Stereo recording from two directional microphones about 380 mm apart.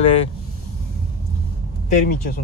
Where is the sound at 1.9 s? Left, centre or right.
Left.